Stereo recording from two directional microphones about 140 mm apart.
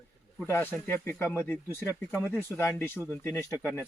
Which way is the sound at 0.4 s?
15° left (ahead or behind).